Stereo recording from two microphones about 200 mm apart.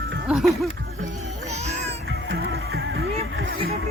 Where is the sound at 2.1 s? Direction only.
55° right (ahead or behind).